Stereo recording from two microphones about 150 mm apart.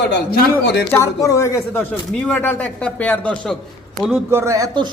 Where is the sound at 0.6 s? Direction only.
90° left.